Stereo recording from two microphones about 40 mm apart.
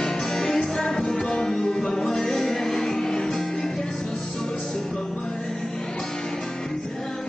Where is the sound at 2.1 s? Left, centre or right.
Centre.